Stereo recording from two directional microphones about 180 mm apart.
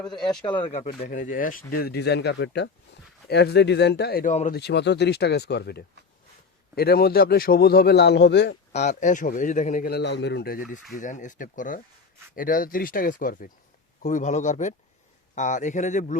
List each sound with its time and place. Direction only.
0.1 s speech: 25° left (ahead or behind)
1.0 s a man's voice: 50° left (ahead or behind)
4.5 s a man's voice: 70° left (ahead or behind)
8.7 s a man's voice: 40° left (ahead or behind)
9.9 s a man's voice: 75° left (ahead or behind); by 16.1 s 40° left (ahead or behind)